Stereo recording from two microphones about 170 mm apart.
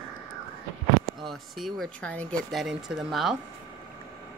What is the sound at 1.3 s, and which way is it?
Speech, centre (ahead or behind).